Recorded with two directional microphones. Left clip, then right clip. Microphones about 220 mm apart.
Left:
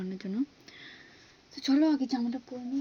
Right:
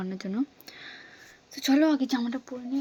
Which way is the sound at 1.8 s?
40° right (ahead or behind).